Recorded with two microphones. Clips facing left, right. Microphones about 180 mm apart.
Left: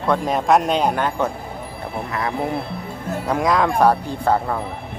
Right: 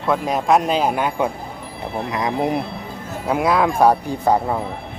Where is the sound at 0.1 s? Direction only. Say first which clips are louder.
Even; centre (ahead or behind); by 2.6 s 15° right (ahead or behind).